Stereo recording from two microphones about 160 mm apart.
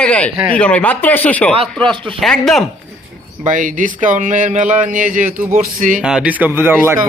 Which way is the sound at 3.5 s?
55° right (ahead or behind).